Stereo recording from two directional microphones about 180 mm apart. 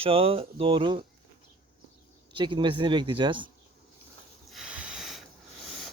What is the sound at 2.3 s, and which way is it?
Speech, 30° right (ahead or behind).